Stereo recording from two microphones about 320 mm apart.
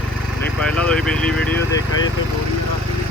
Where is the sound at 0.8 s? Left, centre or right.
Centre.